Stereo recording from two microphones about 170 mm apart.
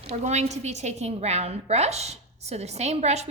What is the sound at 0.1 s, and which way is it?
A woman's voice, 40° right (ahead or behind).